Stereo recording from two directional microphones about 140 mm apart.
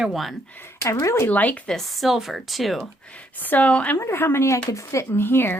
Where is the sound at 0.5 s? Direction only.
15° left (ahead or behind).